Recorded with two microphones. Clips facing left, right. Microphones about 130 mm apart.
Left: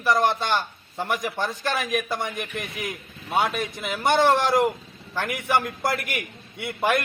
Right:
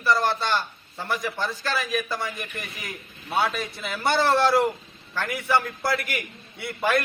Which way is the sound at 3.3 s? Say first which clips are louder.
Left 1 dB; 15° left (ahead or behind).